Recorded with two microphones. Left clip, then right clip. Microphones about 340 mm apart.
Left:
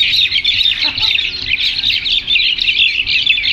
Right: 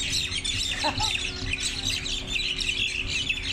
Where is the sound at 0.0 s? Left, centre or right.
Right.